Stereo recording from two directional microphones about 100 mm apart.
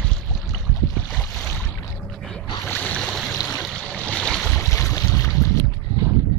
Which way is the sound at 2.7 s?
15° left (ahead or behind).